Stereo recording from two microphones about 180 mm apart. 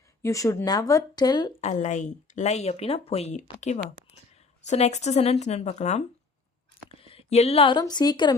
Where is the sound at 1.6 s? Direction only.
40° left (ahead or behind).